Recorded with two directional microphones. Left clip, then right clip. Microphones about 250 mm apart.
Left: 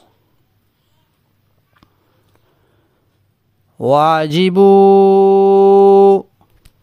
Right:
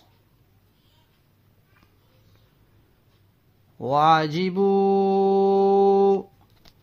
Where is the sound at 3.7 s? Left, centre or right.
Left.